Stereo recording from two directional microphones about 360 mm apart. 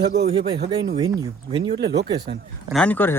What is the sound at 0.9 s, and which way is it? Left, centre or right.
Speech, centre.